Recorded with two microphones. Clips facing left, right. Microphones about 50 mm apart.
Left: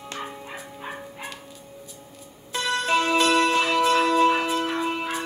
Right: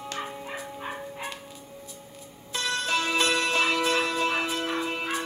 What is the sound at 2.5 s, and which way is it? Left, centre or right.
Music, left.